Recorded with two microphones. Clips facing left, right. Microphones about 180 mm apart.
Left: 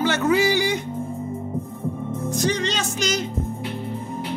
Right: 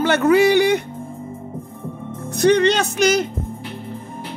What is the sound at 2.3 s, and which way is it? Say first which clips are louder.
Speech: right 10 dB; 65° right (ahead or behind).